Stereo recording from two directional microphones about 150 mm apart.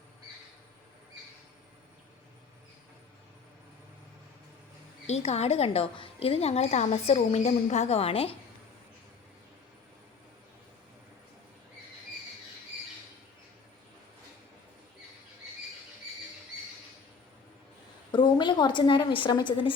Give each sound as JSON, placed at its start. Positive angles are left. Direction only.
{"t": 5.0, "sound": "a woman's voice", "side_deg": 45}
{"t": 18.1, "sound": "a woman's voice", "side_deg": 30}